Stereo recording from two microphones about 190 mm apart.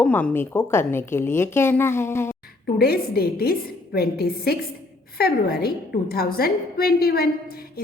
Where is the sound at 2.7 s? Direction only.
55° left (ahead or behind).